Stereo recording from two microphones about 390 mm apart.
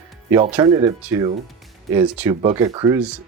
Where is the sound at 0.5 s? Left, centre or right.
Centre.